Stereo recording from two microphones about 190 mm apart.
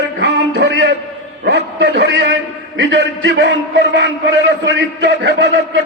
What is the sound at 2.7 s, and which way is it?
A man's voice, 80° right.